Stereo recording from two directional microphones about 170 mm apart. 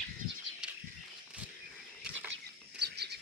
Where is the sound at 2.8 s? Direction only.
75° right (ahead or behind).